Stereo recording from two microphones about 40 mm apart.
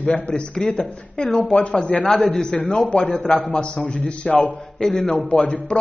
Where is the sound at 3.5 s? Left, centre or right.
Left.